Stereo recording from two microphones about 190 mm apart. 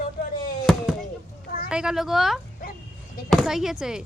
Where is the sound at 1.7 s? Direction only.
5° right (ahead or behind).